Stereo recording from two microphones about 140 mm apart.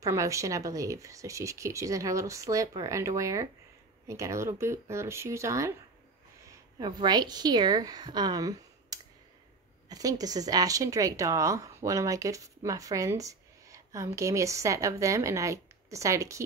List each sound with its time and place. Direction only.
0.0 s a woman's voice: 25° right (ahead or behind)